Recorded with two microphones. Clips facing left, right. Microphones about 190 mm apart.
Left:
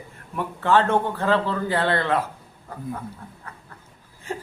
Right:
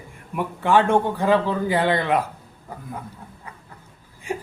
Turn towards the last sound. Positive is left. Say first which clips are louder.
# right 3 dB
turn(degrees=-15)  # may be behind; listen again after turning